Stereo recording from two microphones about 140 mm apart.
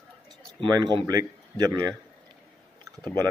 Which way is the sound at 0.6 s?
30° right (ahead or behind).